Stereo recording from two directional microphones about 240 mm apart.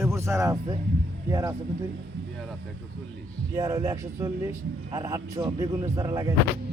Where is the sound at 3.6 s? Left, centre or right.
Centre.